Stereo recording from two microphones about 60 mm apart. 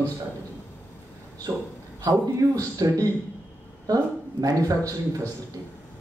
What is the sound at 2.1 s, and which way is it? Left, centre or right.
A man's voice, right.